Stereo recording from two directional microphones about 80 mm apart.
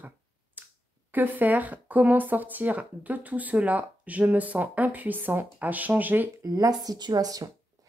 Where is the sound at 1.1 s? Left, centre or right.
Right.